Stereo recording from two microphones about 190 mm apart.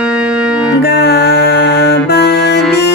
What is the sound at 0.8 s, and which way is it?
Music, 60° left (ahead or behind).